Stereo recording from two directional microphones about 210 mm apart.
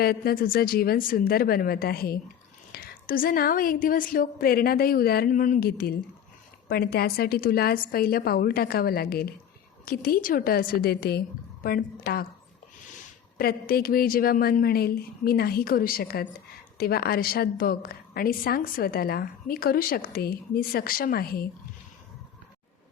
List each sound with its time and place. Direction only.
0.0 s a woman's voice: 45° left (ahead or behind)
13.4 s a woman's voice: 45° left (ahead or behind)